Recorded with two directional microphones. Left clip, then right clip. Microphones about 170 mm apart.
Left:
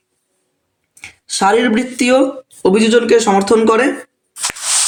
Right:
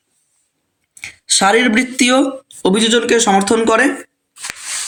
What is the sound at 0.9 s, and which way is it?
Speech, 35° right (ahead or behind).